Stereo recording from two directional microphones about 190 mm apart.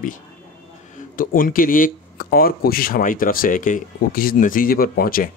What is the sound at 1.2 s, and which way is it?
Speech, 45° left (ahead or behind).